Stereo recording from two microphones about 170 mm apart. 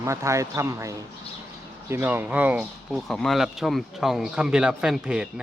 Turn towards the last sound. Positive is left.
turn(degrees=-5)  # may be behind; listen again after turning